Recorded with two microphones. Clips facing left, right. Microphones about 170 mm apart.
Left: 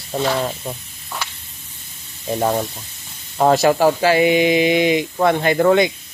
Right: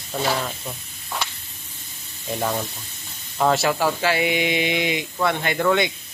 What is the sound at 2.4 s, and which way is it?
Speech, 35° left (ahead or behind).